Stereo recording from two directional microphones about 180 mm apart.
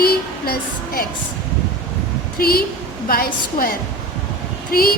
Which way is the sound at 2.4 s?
55° left (ahead or behind).